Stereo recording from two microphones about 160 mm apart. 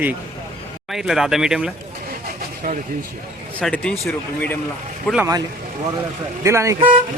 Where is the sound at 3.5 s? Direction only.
10° left (ahead or behind).